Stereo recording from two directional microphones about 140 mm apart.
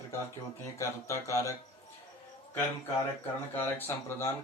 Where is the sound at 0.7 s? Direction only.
20° left (ahead or behind).